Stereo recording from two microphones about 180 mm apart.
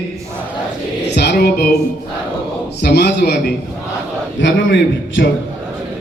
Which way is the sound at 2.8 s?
65° left (ahead or behind).